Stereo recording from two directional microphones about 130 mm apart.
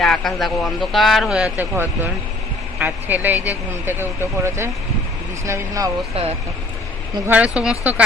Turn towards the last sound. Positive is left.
turn(degrees=-10)  # may be behind; listen again after turning